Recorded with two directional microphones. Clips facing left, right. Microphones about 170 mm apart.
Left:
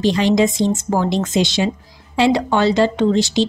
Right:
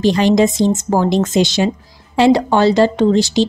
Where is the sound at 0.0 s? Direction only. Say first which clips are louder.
Right 3 dB; 45° right (ahead or behind).